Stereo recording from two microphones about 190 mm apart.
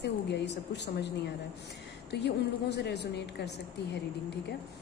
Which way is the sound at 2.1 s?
65° left (ahead or behind).